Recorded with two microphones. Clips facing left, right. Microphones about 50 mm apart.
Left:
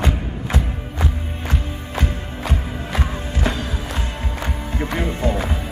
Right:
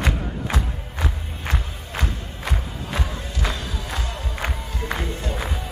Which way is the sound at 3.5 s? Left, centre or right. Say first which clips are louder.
Left 5 dB; left.